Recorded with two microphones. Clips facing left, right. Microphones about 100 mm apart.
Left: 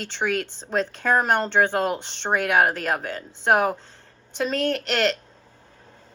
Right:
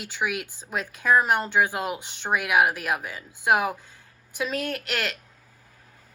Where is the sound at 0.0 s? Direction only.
10° right (ahead or behind).